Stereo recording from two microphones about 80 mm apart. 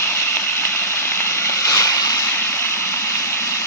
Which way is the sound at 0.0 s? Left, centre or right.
Left.